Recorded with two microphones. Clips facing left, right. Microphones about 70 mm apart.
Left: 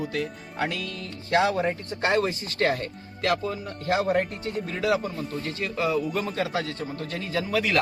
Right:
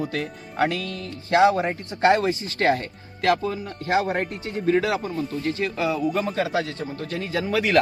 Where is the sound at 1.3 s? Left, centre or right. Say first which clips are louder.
Right 4 dB; right.